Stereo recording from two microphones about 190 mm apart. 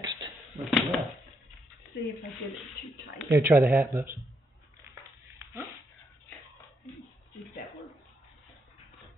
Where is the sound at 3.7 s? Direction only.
15° right (ahead or behind).